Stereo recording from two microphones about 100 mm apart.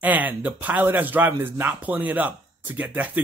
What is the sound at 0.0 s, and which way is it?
Speech, 15° right (ahead or behind).